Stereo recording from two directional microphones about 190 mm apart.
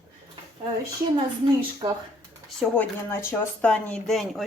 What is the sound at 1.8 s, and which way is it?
Speech, 25° right (ahead or behind).